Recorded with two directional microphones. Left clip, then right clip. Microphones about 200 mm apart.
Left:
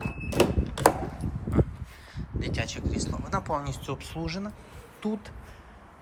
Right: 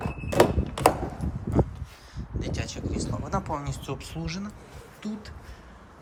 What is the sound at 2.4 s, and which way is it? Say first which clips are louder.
Speech: left 1 dB; 10° right (ahead or behind).